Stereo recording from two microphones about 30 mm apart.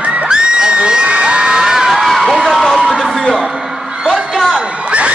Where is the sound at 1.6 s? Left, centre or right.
Centre.